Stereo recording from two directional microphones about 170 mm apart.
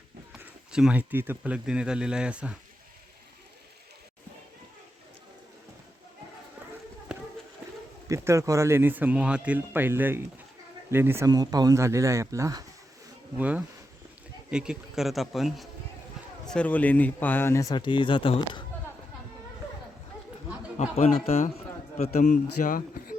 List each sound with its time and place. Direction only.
0.3 s speech: 5° right (ahead or behind)
8.0 s speech: 15° right (ahead or behind)
13.3 s speech: 10° right (ahead or behind); by 18.6 s 30° left (ahead or behind)
20.7 s speech: 40° left (ahead or behind)